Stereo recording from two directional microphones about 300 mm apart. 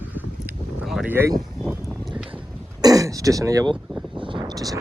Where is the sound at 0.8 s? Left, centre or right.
Centre.